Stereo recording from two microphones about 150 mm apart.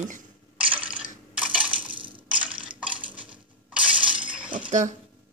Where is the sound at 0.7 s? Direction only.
10° right (ahead or behind).